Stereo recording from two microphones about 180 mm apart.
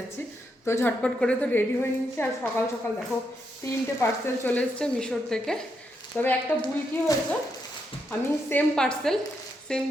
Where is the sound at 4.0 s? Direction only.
10° left (ahead or behind).